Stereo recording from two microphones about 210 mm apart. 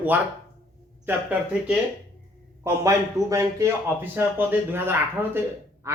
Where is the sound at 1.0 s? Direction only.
5° right (ahead or behind).